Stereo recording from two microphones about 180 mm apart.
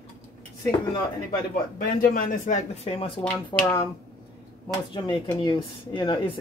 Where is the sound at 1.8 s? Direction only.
50° left (ahead or behind); by 3.1 s 35° left (ahead or behind).